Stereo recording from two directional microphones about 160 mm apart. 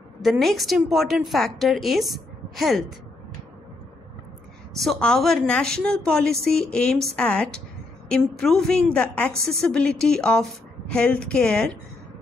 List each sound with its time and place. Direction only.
0.2 s a woman's voice: centre (ahead or behind)
4.7 s a woman's voice: centre (ahead or behind)